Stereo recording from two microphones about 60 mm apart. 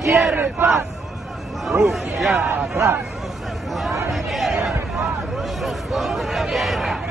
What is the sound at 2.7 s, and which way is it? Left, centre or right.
Speech, right.